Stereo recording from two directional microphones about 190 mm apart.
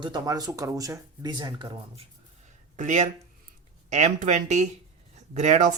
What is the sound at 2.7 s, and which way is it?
Speech, 40° right (ahead or behind).